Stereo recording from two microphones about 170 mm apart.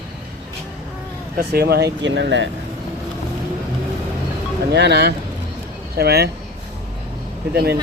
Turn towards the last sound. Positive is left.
turn(degrees=-70)  # may be behind; listen again after turning